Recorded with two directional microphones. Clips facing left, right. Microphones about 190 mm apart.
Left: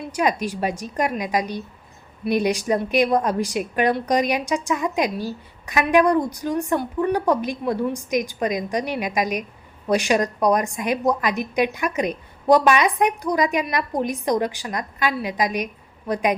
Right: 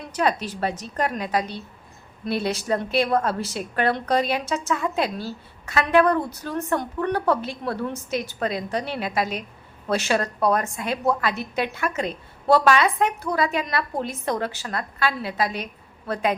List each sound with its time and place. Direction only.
0.1 s a woman's voice: 10° left (ahead or behind)